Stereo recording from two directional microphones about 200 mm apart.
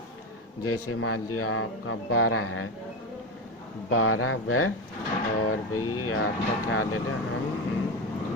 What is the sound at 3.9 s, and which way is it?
Speech, 90° left.